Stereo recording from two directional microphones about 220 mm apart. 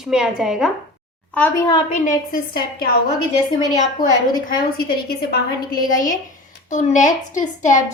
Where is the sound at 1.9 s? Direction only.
40° left (ahead or behind).